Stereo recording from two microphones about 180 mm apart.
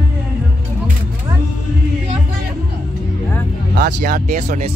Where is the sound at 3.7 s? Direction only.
50° right (ahead or behind).